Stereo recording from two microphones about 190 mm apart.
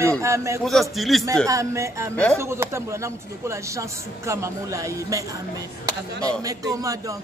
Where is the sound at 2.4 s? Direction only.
15° right (ahead or behind).